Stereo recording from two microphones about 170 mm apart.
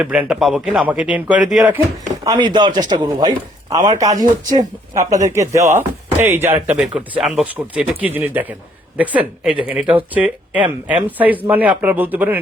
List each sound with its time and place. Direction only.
0.0 s speech: 5° right (ahead or behind)
2.2 s a man's voice: 25° right (ahead or behind); by 12.4 s 10° right (ahead or behind)